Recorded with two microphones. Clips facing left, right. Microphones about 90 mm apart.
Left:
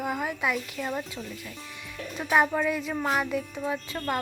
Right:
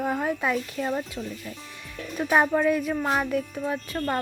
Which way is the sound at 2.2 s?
15° right (ahead or behind).